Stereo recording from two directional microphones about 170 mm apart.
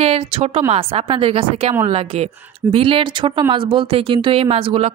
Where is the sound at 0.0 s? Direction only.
40° right (ahead or behind).